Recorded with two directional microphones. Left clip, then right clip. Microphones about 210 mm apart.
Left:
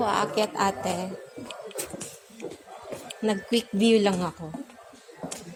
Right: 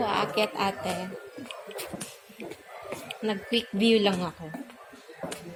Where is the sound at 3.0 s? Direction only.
20° left (ahead or behind).